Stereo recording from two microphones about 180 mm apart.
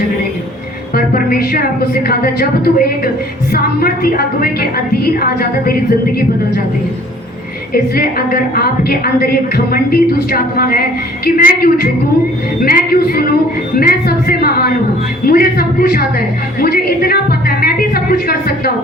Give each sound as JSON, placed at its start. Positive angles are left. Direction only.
{"t": 0.9, "sound": "a woman's voice", "side_deg": 55}
{"t": 7.7, "sound": "a woman's voice", "side_deg": 55}